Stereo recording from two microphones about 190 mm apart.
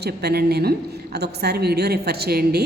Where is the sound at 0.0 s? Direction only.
55° right (ahead or behind).